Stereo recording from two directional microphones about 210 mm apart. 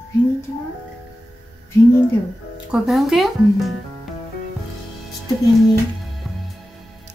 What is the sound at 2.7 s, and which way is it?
Speech, centre (ahead or behind).